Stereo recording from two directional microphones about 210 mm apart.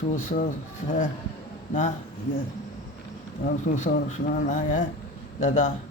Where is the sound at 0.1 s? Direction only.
35° left (ahead or behind).